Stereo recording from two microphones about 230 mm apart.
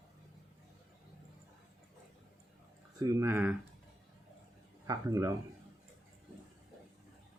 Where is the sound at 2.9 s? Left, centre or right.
Centre.